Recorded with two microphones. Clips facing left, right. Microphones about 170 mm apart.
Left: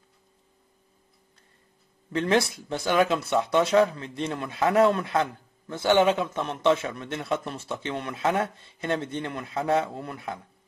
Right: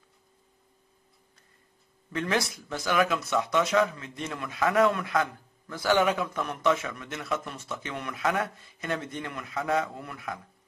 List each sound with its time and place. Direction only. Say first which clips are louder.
2.1 s speech: left 5 dB; 30° left (ahead or behind)